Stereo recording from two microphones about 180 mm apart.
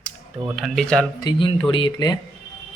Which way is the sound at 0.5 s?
Centre (ahead or behind).